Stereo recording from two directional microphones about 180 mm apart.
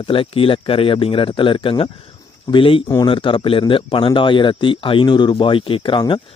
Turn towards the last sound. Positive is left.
turn(degrees=25)  # may be behind; listen again after turning